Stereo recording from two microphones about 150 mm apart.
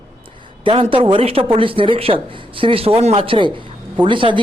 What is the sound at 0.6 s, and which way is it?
Speech, 35° right (ahead or behind).